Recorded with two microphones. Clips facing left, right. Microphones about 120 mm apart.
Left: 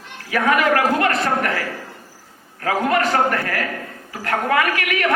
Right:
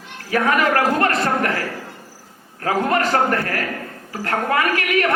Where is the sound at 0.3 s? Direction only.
35° right (ahead or behind).